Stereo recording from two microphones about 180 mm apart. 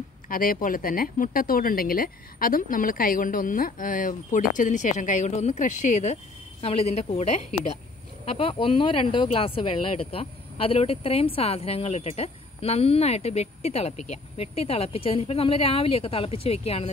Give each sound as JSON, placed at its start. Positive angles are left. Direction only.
{"t": 0.3, "sound": "speech", "side_deg": 50}